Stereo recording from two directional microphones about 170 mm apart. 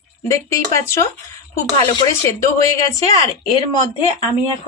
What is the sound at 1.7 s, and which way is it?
Speech, 25° left (ahead or behind).